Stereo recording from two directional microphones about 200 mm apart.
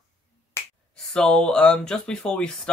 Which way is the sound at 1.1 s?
5° left (ahead or behind).